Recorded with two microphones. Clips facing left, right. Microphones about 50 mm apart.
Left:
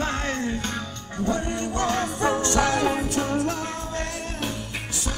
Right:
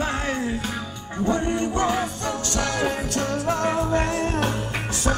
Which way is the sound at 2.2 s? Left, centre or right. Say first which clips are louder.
Left 4 dB; left.